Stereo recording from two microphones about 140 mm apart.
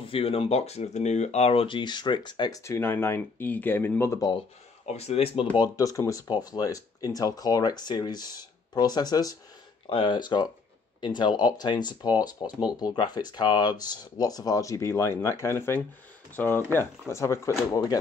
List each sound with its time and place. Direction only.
0.0 s speech: 40° left (ahead or behind)
2.6 s speech: 15° left (ahead or behind)
4.8 s speech: 50° left (ahead or behind)
5.6 s speech: 25° left (ahead or behind)